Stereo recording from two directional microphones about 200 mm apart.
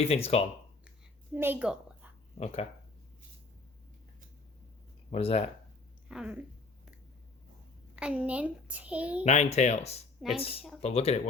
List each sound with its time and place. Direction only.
0.0 s speech: 30° left (ahead or behind)
1.3 s a woman's voice: 10° right (ahead or behind)
2.4 s speech: 30° left (ahead or behind)
5.1 s speech: 30° left (ahead or behind)
6.1 s speech: 5° right (ahead or behind)
7.9 s a child's voice: 5° right (ahead or behind)
9.2 s speech: 35° left (ahead or behind)